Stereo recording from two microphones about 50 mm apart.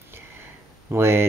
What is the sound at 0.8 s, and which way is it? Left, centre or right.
Speech, right.